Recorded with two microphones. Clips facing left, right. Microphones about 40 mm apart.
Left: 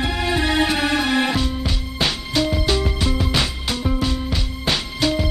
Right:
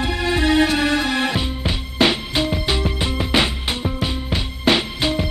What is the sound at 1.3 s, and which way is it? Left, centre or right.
Music, right.